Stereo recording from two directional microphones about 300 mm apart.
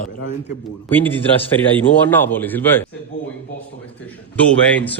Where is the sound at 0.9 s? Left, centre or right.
Centre.